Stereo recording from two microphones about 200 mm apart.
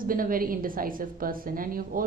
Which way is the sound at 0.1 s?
45° right (ahead or behind).